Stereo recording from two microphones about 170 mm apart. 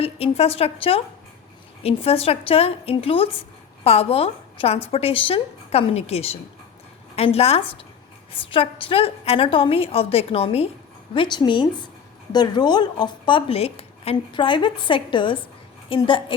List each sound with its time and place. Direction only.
0.0 s a woman's voice: 35° left (ahead or behind)